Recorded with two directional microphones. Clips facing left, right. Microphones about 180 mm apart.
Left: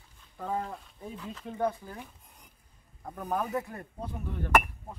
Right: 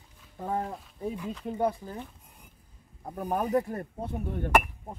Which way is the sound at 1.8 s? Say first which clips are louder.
Right 4 dB; 20° right (ahead or behind).